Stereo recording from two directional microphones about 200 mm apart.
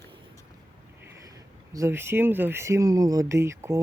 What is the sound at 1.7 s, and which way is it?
Speech, 15° right (ahead or behind).